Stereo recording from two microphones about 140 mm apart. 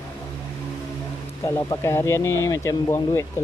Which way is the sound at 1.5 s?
20° left (ahead or behind).